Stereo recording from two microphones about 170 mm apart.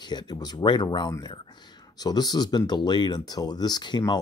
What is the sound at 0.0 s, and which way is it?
Speech, 25° left (ahead or behind).